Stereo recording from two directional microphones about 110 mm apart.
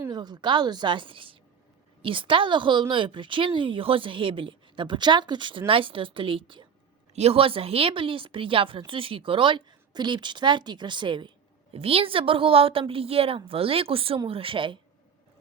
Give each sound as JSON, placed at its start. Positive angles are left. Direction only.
{"t": 0.1, "sound": "a woman's voice", "side_deg": -40}
{"t": 7.1, "sound": "a woman's voice", "side_deg": -70}
{"t": 11.7, "sound": "a woman's voice", "side_deg": -60}